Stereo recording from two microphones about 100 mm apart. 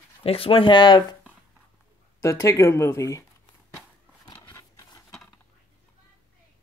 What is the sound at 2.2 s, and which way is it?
Speech, 30° left (ahead or behind).